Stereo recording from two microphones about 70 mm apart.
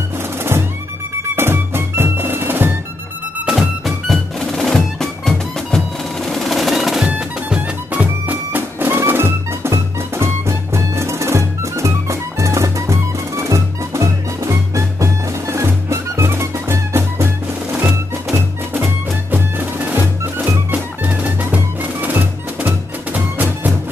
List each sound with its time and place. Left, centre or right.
0.4 s music: right
3.4 s music: centre
7.1 s music: centre